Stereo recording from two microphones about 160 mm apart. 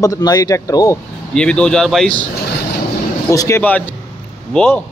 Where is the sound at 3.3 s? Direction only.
20° left (ahead or behind).